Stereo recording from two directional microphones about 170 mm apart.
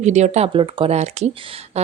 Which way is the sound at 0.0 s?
45° right (ahead or behind).